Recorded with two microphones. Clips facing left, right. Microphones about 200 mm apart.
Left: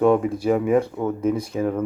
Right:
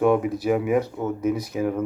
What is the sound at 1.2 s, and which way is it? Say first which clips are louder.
Speech: left 1 dB; 30° left (ahead or behind).